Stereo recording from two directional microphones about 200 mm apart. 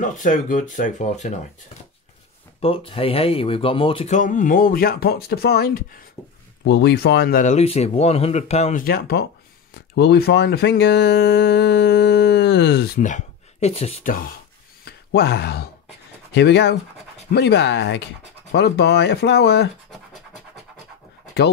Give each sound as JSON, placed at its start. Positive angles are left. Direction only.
{"t": 0.0, "sound": "speech", "side_deg": 40}
{"t": 2.6, "sound": "speech", "side_deg": 30}
{"t": 8.8, "sound": "speech", "side_deg": 50}
{"t": 14.9, "sound": "speech", "side_deg": 55}